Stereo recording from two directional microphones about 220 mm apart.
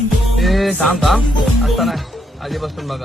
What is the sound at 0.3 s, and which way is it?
Music, centre (ahead or behind).